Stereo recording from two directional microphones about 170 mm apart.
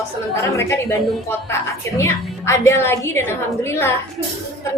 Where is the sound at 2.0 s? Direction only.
15° left (ahead or behind).